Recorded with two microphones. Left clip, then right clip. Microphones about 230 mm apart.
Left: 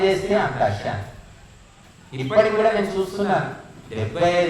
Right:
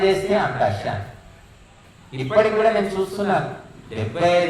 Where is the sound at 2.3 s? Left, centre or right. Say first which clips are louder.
Even; right.